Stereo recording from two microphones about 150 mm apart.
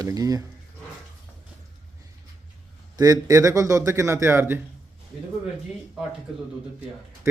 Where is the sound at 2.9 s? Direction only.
25° right (ahead or behind).